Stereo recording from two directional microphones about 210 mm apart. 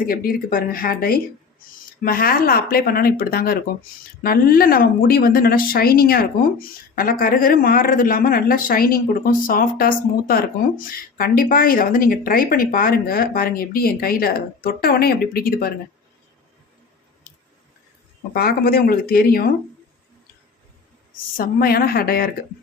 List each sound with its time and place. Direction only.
0.0 s speech: 45° left (ahead or behind)
18.3 s speech: 45° left (ahead or behind)
21.3 s speech: 45° left (ahead or behind)